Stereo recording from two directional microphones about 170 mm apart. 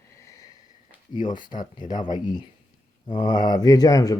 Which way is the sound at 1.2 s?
25° left (ahead or behind).